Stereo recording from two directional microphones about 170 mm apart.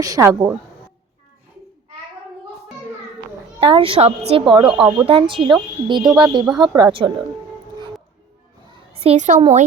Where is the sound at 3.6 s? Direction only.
30° right (ahead or behind).